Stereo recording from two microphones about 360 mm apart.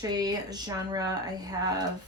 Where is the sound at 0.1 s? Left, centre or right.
Centre.